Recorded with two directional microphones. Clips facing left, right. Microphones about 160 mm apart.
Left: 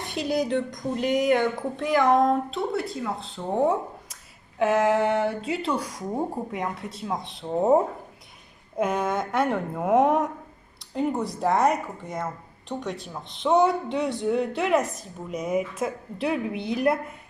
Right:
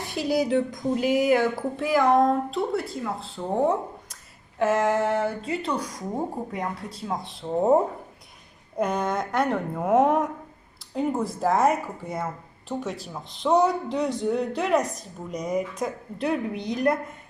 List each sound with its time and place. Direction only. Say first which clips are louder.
0.0 s a woman's voice: right 1 dB; centre (ahead or behind)